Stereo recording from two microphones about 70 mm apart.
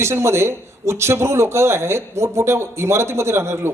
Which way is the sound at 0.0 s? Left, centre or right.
Right.